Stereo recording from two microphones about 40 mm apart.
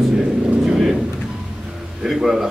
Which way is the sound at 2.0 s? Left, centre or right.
Centre.